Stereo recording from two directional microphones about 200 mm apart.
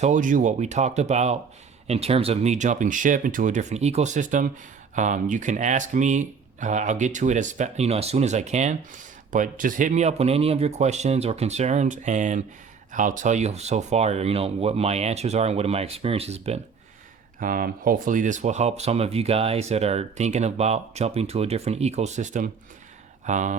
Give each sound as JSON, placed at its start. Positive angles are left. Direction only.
{"t": 0.0, "sound": "speech", "side_deg": -40}
{"t": 17.4, "sound": "speech", "side_deg": -45}